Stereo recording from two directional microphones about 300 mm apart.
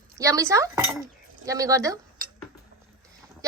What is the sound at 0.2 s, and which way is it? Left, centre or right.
Speech, centre.